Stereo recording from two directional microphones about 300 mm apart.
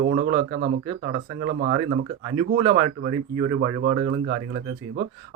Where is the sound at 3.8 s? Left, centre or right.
Right.